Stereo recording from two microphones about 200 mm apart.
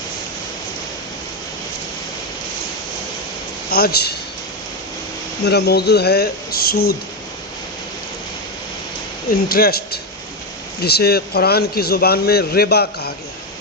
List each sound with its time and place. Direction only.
3.7 s speech: 50° left (ahead or behind)
5.5 s speech: 55° left (ahead or behind)
9.5 s speech: 50° left (ahead or behind)